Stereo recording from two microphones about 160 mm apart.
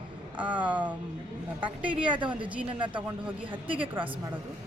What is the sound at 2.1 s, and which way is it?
Speech, 30° right (ahead or behind).